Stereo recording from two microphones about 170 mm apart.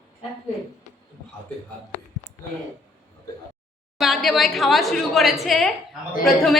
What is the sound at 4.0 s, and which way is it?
A woman's voice, centre (ahead or behind).